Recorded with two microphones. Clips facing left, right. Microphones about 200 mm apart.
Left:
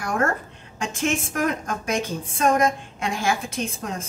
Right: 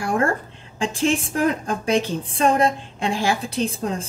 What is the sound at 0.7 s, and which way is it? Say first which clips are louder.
A woman's voice: right 4 dB; 30° right (ahead or behind).